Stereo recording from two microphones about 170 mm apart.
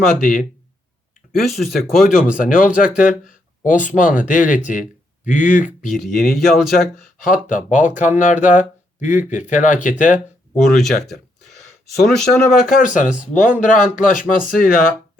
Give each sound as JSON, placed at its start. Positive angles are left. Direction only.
{"t": 0.2, "sound": "speech", "side_deg": 50}
{"t": 1.4, "sound": "speech", "side_deg": 0}
{"t": 2.4, "sound": "speech", "side_deg": 50}
{"t": 5.9, "sound": "speech", "side_deg": 0}
{"t": 7.3, "sound": "speech", "side_deg": 50}
{"t": 10.8, "sound": "speech", "side_deg": 0}
{"t": 12.7, "sound": "speech", "side_deg": 50}